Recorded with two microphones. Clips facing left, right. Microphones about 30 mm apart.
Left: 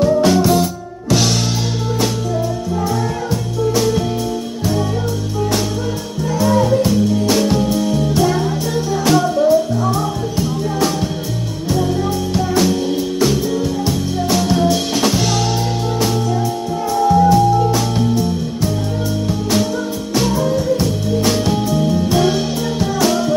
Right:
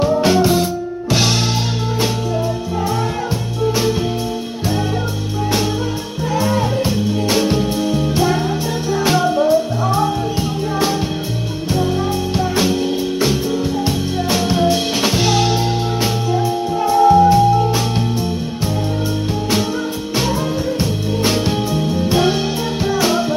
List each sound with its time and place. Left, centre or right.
0.0 s music: centre
6.3 s music: right
12.4 s music: right
13.8 s music: right
17.0 s music: right
20.8 s music: right